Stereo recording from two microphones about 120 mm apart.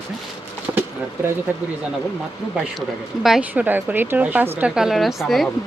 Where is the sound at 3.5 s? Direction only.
15° right (ahead or behind).